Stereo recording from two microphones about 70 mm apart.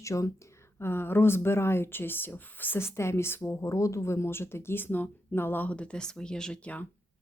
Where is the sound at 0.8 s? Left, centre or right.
Left.